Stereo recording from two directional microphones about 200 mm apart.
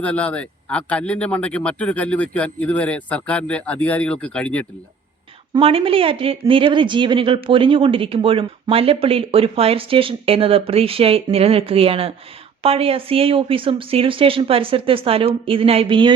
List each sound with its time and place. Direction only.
0.0 s speech: 5° left (ahead or behind)
5.5 s speech: 25° right (ahead or behind)